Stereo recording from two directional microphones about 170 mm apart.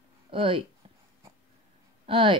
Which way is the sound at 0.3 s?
30° right (ahead or behind).